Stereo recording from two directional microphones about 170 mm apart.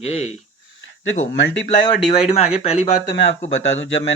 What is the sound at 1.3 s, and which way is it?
Speech, 90° left.